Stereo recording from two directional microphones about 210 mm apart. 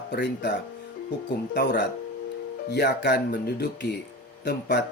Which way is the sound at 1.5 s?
55° left (ahead or behind).